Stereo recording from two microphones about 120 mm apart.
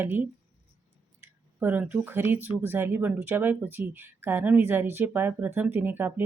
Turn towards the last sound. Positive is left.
turn(degrees=-15)  # may be behind; listen again after turning